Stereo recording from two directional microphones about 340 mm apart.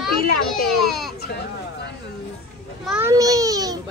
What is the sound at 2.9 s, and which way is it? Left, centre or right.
Speech, centre.